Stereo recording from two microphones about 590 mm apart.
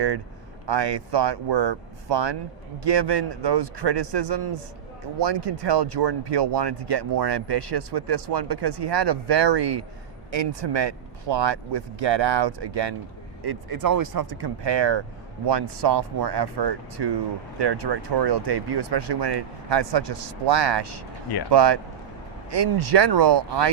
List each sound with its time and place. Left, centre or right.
0.7 s speech: right